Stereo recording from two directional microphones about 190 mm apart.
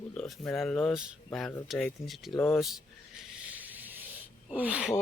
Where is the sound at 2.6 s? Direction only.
Centre (ahead or behind).